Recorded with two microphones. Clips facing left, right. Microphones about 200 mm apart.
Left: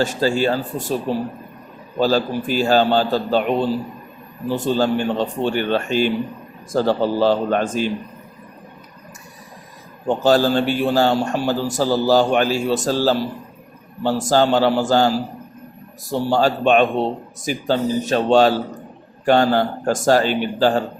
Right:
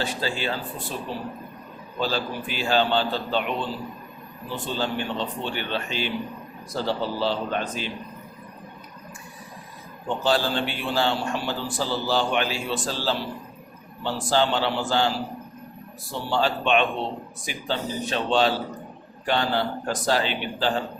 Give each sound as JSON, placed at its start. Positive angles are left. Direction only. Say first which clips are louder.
{"t": 0.0, "sound": "a man's voice", "louder": "left 10 dB", "side_deg": 45}
{"t": 10.1, "sound": "a man's voice", "louder": "left 8 dB", "side_deg": 45}